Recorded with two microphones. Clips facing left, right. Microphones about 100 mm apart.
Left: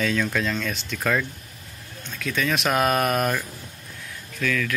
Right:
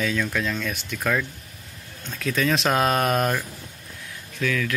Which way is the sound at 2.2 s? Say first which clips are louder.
Right 2 dB; 35° right (ahead or behind).